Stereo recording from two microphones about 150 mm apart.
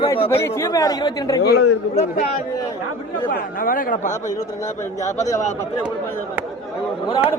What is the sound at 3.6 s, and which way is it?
Speech, 65° left (ahead or behind).